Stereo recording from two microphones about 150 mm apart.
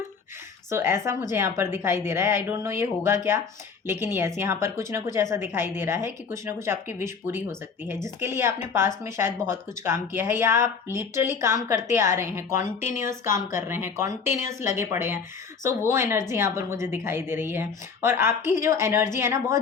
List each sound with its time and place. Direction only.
0.7 s a woman's voice: 15° right (ahead or behind)